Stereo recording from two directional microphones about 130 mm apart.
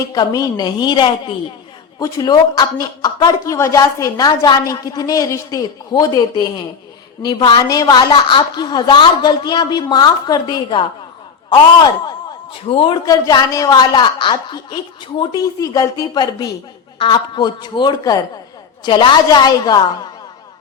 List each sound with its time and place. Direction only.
0.1 s a woman's voice: 30° left (ahead or behind)
13.1 s a woman's voice: 25° left (ahead or behind)